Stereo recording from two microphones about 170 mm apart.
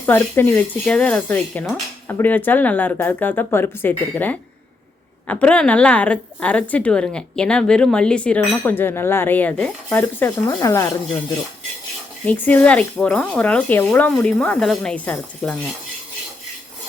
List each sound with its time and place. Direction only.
0.0 s a woman's voice: 10° left (ahead or behind)
12.2 s a woman's voice: 10° left (ahead or behind)